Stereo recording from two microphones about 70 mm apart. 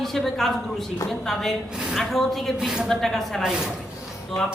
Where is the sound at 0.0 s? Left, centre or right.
Centre.